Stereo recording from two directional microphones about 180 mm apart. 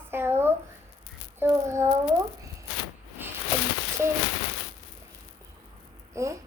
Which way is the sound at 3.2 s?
10° right (ahead or behind).